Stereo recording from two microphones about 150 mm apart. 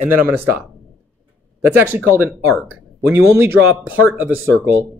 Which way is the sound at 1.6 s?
15° right (ahead or behind).